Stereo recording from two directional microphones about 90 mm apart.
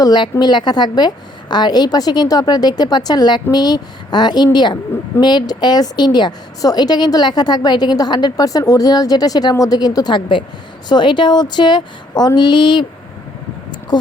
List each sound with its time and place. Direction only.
0.0 s a woman's voice: 50° left (ahead or behind)
13.9 s a woman's voice: 50° left (ahead or behind)